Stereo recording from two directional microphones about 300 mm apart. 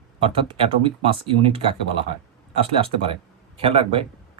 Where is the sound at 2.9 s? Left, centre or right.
Centre.